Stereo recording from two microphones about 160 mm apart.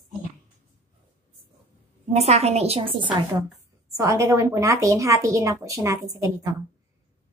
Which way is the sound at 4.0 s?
20° right (ahead or behind).